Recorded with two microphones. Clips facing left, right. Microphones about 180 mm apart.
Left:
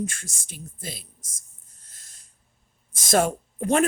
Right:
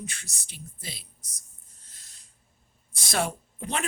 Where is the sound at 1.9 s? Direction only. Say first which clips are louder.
Left 2 dB; 45° left (ahead or behind).